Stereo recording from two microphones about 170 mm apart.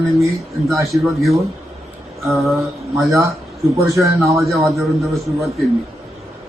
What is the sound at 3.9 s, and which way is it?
Speech, 15° right (ahead or behind).